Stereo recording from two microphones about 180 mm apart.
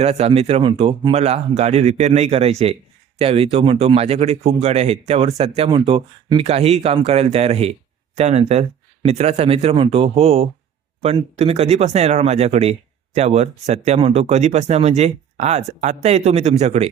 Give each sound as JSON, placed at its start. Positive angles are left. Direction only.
{"t": 0.0, "sound": "speech", "side_deg": -35}